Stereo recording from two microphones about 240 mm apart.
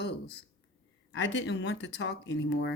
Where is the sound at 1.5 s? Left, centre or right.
Left.